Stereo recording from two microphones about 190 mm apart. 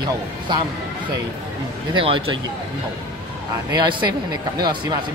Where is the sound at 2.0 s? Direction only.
25° right (ahead or behind).